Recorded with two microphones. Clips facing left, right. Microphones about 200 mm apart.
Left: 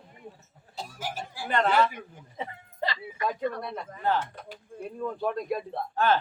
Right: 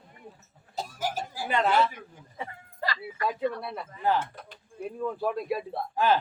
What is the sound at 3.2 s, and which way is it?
A man's voice, 5° right (ahead or behind).